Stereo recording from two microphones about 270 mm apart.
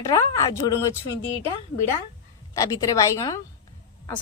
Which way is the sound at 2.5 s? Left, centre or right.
Centre.